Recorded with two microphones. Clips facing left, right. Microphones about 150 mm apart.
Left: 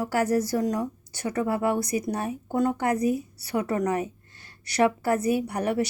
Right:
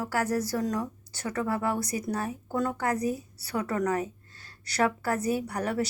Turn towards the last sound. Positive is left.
turn(degrees=20)  # may be behind; listen again after turning